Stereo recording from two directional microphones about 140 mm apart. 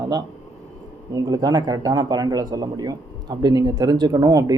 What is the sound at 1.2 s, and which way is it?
Speech, 30° right (ahead or behind).